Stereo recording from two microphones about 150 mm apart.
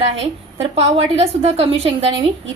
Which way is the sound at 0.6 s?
40° right (ahead or behind).